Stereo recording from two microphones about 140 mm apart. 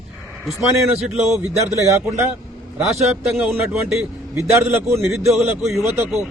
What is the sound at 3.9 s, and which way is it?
A man's voice, 20° right (ahead or behind).